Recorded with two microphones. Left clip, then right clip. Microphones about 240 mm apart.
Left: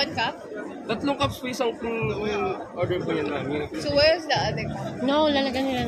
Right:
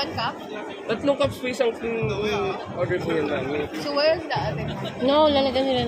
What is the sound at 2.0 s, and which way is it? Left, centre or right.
Speech, right.